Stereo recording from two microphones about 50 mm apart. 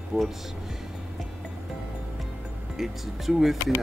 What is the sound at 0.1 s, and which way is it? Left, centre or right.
Speech, centre.